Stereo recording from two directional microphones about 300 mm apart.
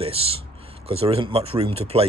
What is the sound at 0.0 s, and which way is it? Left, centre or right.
Speech, centre.